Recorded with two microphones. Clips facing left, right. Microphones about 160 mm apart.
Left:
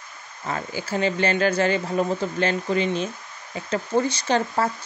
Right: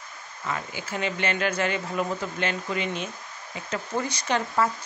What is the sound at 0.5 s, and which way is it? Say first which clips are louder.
Speech: left 4 dB; 35° left (ahead or behind).